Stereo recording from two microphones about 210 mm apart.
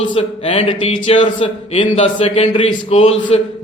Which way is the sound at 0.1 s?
25° left (ahead or behind).